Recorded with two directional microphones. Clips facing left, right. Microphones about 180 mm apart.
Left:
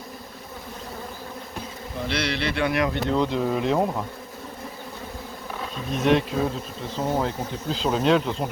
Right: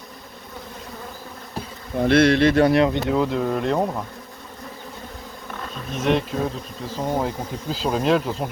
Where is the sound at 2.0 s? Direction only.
50° right (ahead or behind); by 2.9 s 35° right (ahead or behind).